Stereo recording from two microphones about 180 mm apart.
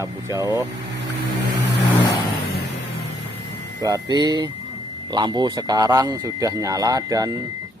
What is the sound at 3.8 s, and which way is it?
Speech, 20° right (ahead or behind).